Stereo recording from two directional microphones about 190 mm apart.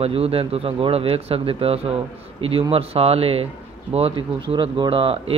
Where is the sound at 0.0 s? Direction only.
30° right (ahead or behind).